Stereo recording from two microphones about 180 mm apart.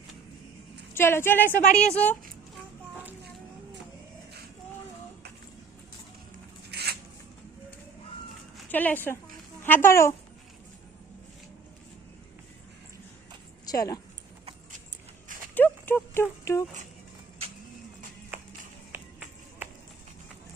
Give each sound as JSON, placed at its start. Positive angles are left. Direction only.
{"t": 0.9, "sound": "speech", "side_deg": 15}
{"t": 6.7, "sound": "a sound", "side_deg": -65}
{"t": 8.5, "sound": "speech", "side_deg": 10}
{"t": 13.7, "sound": "speech", "side_deg": 20}
{"t": 15.5, "sound": "clip-clop", "side_deg": 10}